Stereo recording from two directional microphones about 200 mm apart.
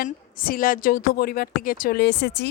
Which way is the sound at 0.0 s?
45° left (ahead or behind).